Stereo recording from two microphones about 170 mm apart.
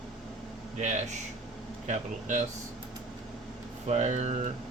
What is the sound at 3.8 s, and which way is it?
Speech, 40° right (ahead or behind).